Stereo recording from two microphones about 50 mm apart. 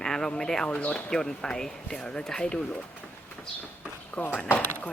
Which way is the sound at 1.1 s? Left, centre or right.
Centre.